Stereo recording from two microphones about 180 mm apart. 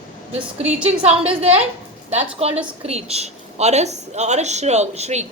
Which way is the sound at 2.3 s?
35° right (ahead or behind).